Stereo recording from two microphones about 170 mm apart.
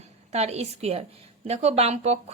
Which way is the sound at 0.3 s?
40° right (ahead or behind).